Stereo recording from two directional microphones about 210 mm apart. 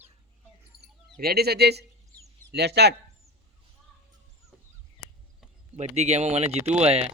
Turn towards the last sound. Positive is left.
turn(degrees=-30)  # may be behind; listen again after turning